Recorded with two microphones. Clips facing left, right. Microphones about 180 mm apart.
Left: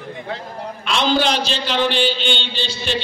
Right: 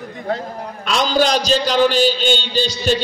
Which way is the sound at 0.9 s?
40° right (ahead or behind).